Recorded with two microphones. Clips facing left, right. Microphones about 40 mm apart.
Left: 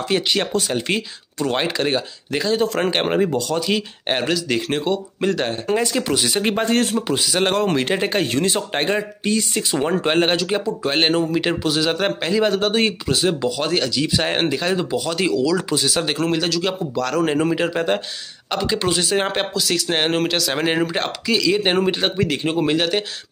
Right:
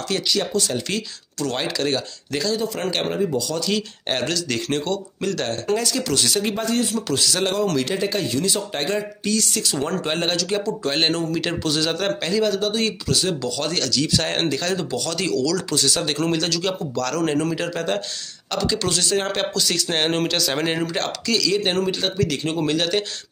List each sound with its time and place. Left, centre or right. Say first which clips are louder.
0.3 s a man's voice: left 2 dB; left
0.6 s speech: left 2 dB; left
2.5 s speech: left 8 dB; left
2.8 s speech: left 4 dB; left
6.4 s a man's voice: left 4 dB; left
7.0 s speech: left 1 dB; left
7.3 s a man's voice: left 5 dB; left; by 12.4 s centre
12.4 s speech: left 3 dB; left; by 20.6 s centre
20.6 s speech: left 3 dB; centre